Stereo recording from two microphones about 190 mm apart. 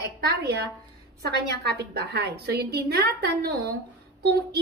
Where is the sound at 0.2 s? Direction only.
60° right (ahead or behind).